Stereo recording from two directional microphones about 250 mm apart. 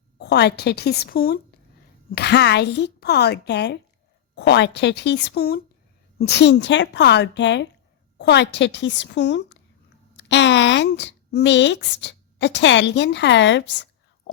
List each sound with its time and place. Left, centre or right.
0.2 s a woman's voice: left